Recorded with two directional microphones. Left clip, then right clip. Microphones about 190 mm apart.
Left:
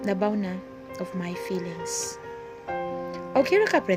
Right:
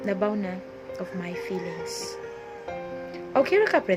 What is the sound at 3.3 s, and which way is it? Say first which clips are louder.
Speech: even; 30° left (ahead or behind).